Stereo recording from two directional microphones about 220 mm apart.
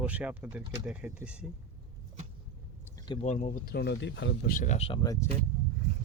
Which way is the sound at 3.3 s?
35° left (ahead or behind).